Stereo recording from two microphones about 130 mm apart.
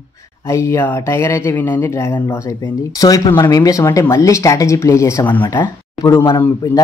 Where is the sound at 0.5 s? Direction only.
20° left (ahead or behind).